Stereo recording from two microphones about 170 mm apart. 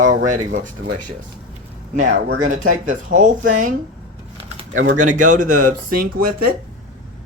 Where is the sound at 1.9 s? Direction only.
50° right (ahead or behind).